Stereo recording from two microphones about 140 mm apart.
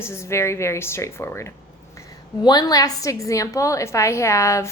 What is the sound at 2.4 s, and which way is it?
A woman's voice, 30° left (ahead or behind).